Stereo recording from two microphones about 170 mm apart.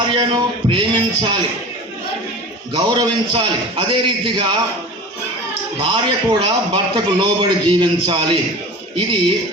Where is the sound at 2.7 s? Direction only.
25° right (ahead or behind).